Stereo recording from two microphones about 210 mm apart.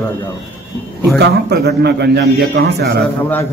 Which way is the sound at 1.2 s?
50° right (ahead or behind).